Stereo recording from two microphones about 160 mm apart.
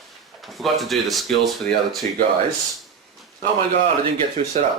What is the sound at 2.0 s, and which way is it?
Speech, 50° right (ahead or behind).